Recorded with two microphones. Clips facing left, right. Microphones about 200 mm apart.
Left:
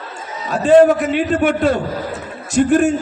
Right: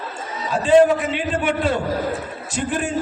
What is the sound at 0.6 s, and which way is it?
A man's voice, 45° left (ahead or behind).